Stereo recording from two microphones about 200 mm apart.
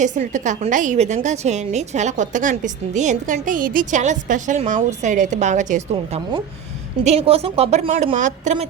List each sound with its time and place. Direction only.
0.0 s a woman's voice: 40° right (ahead or behind)